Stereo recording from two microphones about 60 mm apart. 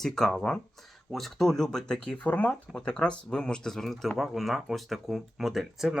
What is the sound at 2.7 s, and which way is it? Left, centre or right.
Speech, centre.